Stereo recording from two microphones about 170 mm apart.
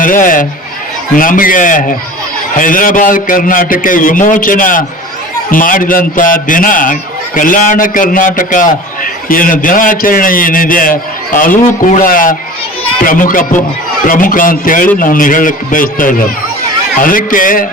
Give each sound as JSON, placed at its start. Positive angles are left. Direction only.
{"t": 0.0, "sound": "speech", "side_deg": 50}